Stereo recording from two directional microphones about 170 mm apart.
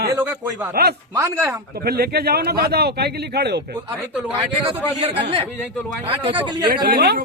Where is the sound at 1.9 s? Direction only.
65° right (ahead or behind).